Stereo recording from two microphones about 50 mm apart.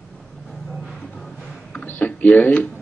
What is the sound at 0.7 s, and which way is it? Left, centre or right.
Music, centre.